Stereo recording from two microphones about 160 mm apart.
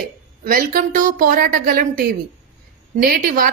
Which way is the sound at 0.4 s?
60° right (ahead or behind).